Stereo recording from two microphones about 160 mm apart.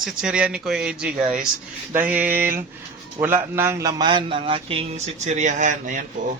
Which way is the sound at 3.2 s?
15° right (ahead or behind).